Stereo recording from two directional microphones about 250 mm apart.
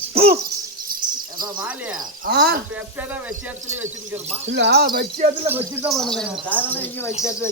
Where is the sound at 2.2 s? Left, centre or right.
Right.